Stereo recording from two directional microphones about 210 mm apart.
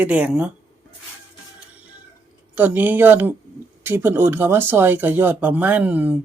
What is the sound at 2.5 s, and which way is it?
Speech, 10° right (ahead or behind).